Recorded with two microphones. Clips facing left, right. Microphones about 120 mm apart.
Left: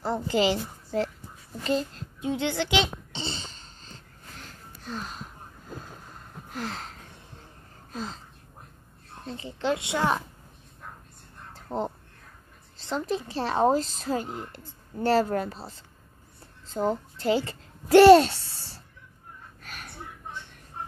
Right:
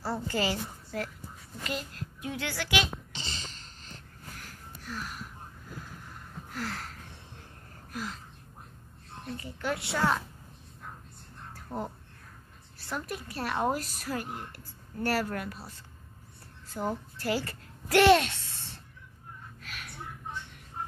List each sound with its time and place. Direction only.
0.0 s a woman's voice: 20° left (ahead or behind)
4.4 s gasp: 25° left (ahead or behind)
6.5 s a sound: 20° left (ahead or behind)
7.9 s speech: 25° left (ahead or behind)
9.2 s a woman's voice: 25° left (ahead or behind)
11.5 s a sound: 20° left (ahead or behind)
12.7 s a woman's voice: 20° left (ahead or behind)
19.6 s gasp: 40° left (ahead or behind)